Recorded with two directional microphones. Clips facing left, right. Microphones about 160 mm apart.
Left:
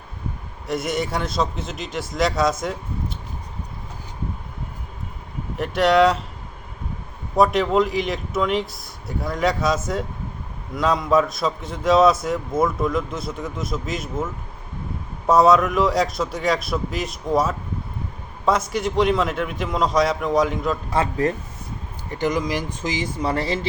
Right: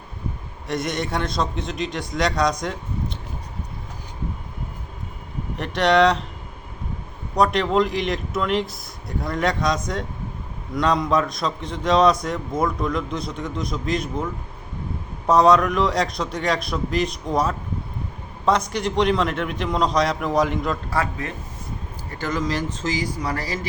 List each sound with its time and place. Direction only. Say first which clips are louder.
0.7 s a man's voice: left 1 dB; centre (ahead or behind)
5.5 s a man's voice: left 1 dB; centre (ahead or behind)
7.3 s a man's voice: left 1 dB; 5° left (ahead or behind)
15.3 s a man's voice: even; 5° left (ahead or behind)
21.2 s speech: left 10 dB; 35° left (ahead or behind)
22.1 s speech: left 2 dB; 15° left (ahead or behind)